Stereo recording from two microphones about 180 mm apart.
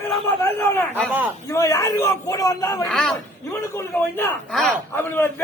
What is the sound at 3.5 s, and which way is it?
A man's voice, 15° left (ahead or behind).